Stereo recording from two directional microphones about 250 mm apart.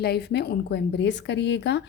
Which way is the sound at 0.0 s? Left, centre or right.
Left.